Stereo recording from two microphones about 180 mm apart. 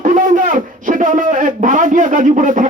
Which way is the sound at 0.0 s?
45° right (ahead or behind).